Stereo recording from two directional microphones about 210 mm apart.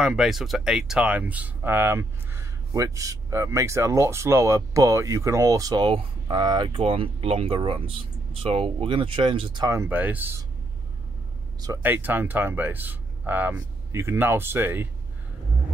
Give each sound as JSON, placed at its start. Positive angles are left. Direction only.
{"t": 0.0, "sound": "speech", "side_deg": 0}
{"t": 11.6, "sound": "speech", "side_deg": -10}